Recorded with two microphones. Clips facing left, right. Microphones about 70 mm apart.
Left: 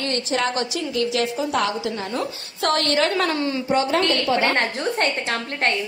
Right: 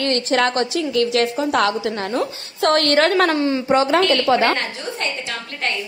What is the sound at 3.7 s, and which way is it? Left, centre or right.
Speech, right.